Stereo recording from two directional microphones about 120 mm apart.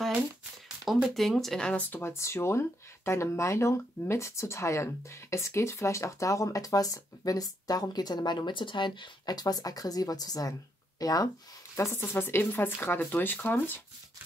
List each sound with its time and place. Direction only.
0.8 s speech: centre (ahead or behind); by 13.7 s 15° left (ahead or behind)